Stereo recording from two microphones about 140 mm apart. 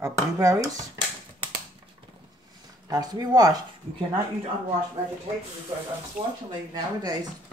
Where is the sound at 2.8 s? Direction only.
25° right (ahead or behind).